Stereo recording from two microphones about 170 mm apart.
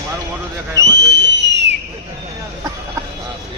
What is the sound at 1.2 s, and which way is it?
Fireworks, 90° right.